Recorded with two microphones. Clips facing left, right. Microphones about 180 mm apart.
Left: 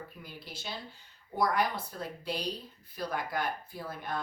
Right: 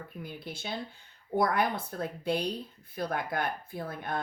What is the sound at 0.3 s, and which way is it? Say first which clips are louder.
A woman's voice: right 6 dB; 55° right (ahead or behind).